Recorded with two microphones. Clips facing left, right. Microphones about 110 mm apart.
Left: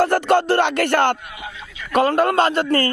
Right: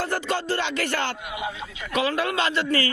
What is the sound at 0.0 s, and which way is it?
Music, 60° left (ahead or behind).